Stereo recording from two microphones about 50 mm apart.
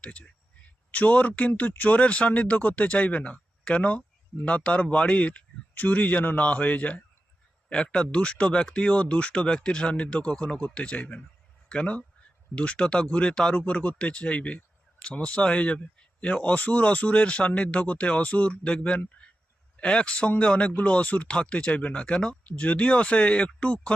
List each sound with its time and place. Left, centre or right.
0.0 s speech: left
2.0 s speech: left
7.7 s speech: centre